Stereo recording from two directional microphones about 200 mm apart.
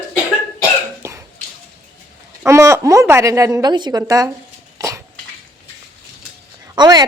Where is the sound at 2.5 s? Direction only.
15° right (ahead or behind).